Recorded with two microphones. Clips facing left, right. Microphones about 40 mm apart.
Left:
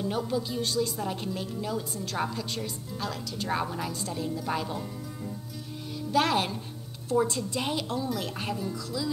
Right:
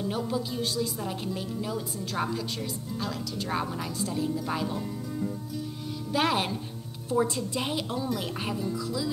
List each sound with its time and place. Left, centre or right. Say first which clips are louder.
0.0 s a woman's voice: left 1 dB; centre